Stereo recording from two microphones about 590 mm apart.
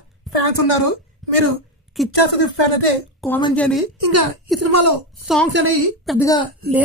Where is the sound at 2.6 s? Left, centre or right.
Left.